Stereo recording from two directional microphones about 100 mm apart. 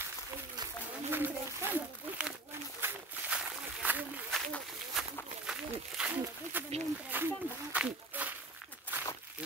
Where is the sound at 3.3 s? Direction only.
15° right (ahead or behind).